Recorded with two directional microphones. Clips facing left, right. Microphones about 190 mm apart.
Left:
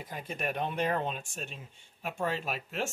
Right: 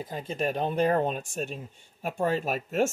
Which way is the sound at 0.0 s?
30° right (ahead or behind).